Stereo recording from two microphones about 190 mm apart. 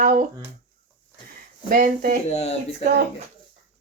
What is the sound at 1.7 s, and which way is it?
Speech, 45° right (ahead or behind).